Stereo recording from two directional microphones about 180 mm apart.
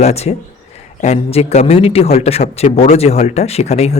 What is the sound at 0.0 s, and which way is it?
A man's voice, 35° left (ahead or behind).